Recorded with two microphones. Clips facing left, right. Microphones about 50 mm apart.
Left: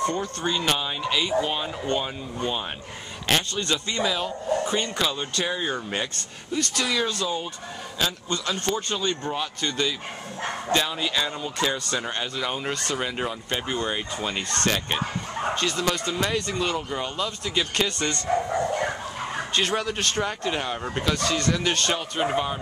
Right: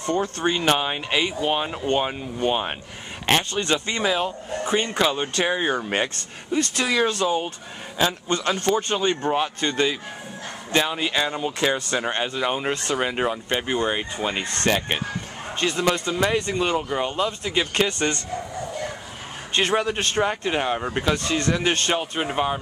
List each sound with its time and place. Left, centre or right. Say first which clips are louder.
0.2 s speech: right 4 dB; right
8.6 s speech: right 5 dB; centre
19.5 s speech: right 5 dB; right